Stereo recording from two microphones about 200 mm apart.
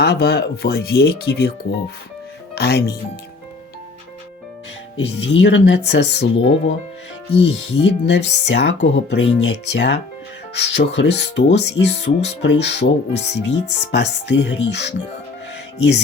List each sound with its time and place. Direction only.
0.0 s speech: 55° left (ahead or behind)
2.6 s speech: 55° left (ahead or behind)
4.9 s speech: 65° left (ahead or behind)
7.4 s speech: 60° left (ahead or behind)